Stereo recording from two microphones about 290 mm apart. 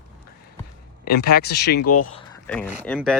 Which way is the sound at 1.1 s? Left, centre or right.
Left.